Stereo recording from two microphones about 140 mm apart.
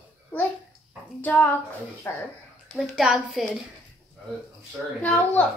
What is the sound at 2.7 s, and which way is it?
Speech, 5° right (ahead or behind).